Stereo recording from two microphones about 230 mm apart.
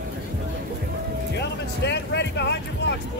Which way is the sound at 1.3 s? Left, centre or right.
Left.